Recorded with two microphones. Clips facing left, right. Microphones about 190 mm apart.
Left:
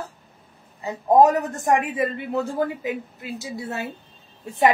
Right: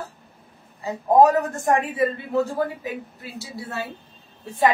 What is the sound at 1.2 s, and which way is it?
Speech, 20° left (ahead or behind).